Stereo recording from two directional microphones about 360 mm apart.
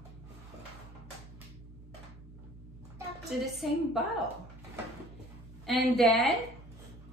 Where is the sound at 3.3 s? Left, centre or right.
Centre.